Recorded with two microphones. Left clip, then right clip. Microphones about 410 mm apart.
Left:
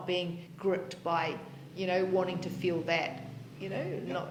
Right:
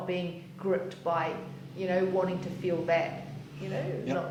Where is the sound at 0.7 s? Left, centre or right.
Left.